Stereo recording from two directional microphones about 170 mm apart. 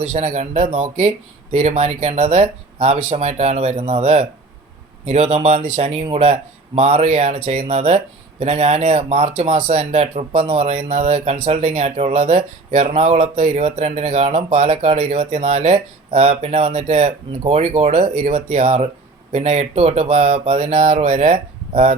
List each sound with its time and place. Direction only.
0.0 s speech: 40° right (ahead or behind)